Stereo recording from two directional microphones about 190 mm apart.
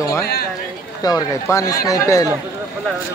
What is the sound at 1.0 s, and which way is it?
Speech, 15° left (ahead or behind).